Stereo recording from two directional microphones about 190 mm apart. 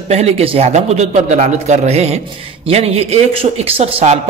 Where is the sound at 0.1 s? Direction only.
35° right (ahead or behind).